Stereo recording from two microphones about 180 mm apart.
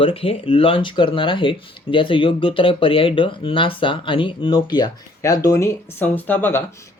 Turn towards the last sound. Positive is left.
turn(degrees=10)  # may be behind; listen again after turning